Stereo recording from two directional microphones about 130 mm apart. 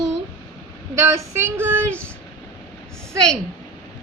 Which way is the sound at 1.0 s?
20° right (ahead or behind).